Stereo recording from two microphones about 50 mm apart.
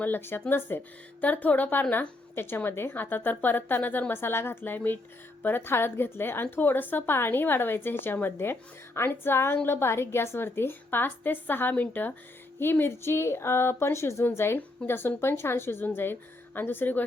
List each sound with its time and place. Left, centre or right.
0.0 s a woman's voice: left
1.2 s a woman's voice: left
2.9 s a woman's voice: left
4.1 s a woman's voice: left
4.6 s a woman's voice: left
12.5 s a woman's voice: left
14.3 s a woman's voice: left